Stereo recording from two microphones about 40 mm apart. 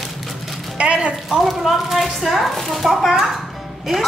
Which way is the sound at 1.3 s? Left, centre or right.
Centre.